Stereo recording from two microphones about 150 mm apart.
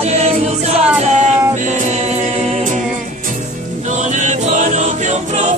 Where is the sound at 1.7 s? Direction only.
50° right (ahead or behind).